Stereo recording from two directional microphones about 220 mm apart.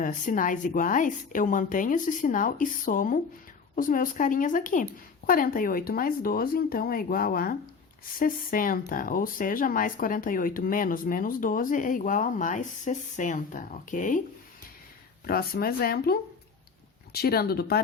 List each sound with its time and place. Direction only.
0.0 s speech: 35° left (ahead or behind)
15.3 s speech: 45° left (ahead or behind)